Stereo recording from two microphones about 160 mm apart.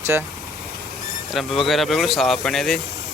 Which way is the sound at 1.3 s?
Centre (ahead or behind).